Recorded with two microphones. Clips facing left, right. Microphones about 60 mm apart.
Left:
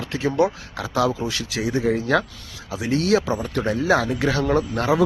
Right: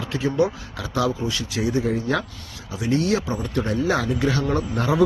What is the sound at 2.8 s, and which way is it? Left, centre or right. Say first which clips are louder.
Speech: left 2 dB; left.